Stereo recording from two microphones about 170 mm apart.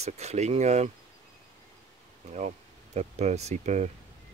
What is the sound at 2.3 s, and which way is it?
Speech, 40° right (ahead or behind).